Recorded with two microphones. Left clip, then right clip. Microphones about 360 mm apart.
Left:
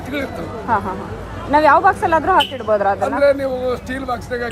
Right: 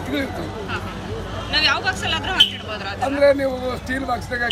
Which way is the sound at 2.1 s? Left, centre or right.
Left.